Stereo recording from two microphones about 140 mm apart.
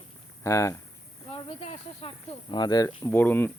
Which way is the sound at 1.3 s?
40° left (ahead or behind).